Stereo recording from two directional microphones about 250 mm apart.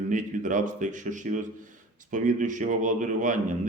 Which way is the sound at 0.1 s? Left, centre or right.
Right.